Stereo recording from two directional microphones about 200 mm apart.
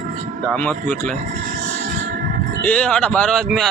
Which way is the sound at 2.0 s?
50° right (ahead or behind).